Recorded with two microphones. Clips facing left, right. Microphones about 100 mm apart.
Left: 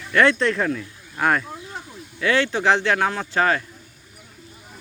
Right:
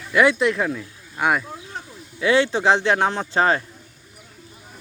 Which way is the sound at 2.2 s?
20° right (ahead or behind).